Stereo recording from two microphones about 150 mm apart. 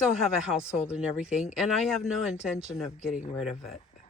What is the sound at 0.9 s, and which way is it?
Speech, 5° right (ahead or behind).